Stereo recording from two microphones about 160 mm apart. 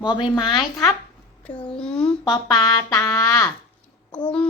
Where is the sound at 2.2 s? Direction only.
25° left (ahead or behind).